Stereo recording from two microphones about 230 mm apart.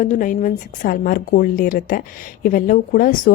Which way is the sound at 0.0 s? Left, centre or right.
Left.